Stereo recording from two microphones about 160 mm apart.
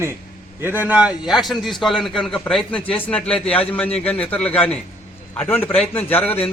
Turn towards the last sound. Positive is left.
turn(degrees=10)  # may be behind; listen again after turning